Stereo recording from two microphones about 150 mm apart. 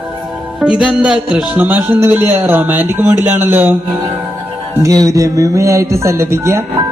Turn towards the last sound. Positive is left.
turn(degrees=-20)  # may be behind; listen again after turning